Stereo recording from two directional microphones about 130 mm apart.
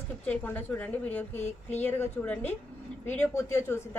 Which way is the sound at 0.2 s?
10° left (ahead or behind).